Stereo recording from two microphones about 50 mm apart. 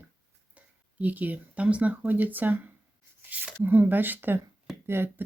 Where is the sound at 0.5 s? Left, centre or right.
Right.